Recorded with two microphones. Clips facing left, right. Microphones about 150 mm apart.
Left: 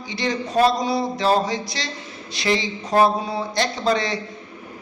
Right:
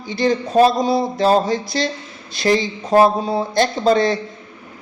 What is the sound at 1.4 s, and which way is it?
A man's voice, 50° right (ahead or behind).